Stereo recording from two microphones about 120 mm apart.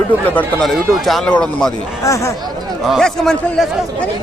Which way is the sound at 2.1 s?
25° left (ahead or behind).